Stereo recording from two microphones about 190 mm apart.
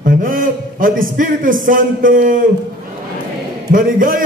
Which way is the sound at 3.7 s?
45° right (ahead or behind).